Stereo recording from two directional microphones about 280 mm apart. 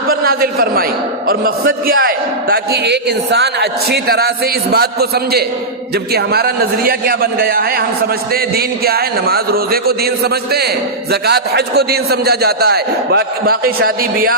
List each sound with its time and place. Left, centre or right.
0.1 s a man's voice: right